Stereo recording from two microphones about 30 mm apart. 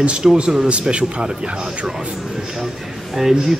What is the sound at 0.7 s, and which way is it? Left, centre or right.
Speech, right.